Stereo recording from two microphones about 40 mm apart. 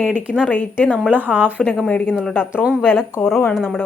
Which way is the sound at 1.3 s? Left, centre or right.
Right.